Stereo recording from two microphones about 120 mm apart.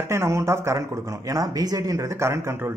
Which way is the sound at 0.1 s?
20° right (ahead or behind).